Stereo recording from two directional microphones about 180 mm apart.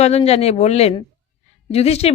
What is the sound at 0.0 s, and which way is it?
Speech, 35° left (ahead or behind).